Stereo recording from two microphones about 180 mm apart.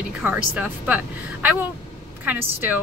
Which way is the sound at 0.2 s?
10° right (ahead or behind).